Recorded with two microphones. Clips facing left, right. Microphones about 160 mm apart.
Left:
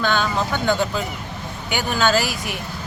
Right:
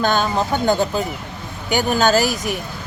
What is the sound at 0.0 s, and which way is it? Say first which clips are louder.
Speech: right 3 dB; 40° right (ahead or behind).